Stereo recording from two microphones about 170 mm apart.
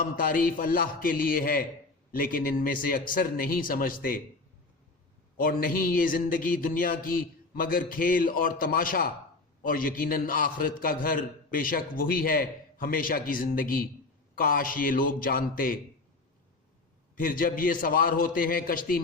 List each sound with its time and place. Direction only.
0.0 s a man's voice: 55° left (ahead or behind)
5.4 s a man's voice: 60° left (ahead or behind)
17.2 s a man's voice: 55° left (ahead or behind)